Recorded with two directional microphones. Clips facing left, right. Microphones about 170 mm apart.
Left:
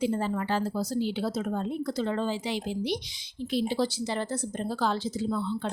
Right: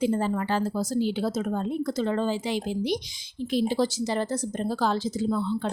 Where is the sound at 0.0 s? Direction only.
45° right (ahead or behind).